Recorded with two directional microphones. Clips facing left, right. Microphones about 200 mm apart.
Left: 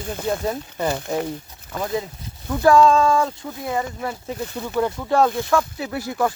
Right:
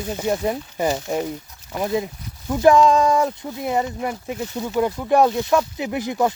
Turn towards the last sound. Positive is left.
turn(degrees=-20)  # may be behind; listen again after turning